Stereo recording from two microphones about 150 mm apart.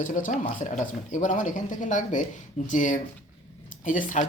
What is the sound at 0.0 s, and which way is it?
Speech, 60° left (ahead or behind).